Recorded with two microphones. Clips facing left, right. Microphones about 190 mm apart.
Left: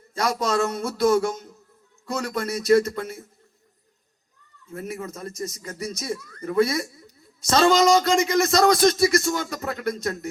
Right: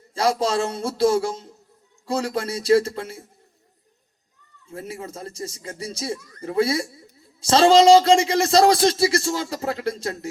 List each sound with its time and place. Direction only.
0.1 s a woman's voice: 30° right (ahead or behind)
4.7 s a woman's voice: 30° right (ahead or behind)